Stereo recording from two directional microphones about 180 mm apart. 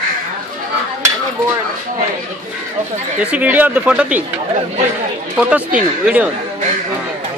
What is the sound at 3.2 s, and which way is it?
Speech, 5° right (ahead or behind).